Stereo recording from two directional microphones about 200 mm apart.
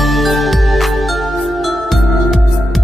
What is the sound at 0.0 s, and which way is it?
Music, centre (ahead or behind).